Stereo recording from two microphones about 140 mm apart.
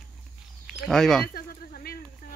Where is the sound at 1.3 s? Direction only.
90° left.